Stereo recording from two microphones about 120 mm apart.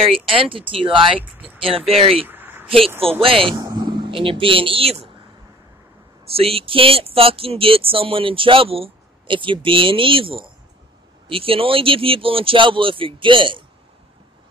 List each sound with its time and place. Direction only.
0.2 s speech: 50° right (ahead or behind)
2.2 s a sound: 15° right (ahead or behind)
3.0 s speech: 50° right (ahead or behind)
3.5 s speech: 35° right (ahead or behind); by 5.0 s 50° right (ahead or behind)
6.2 s speech: 55° right (ahead or behind)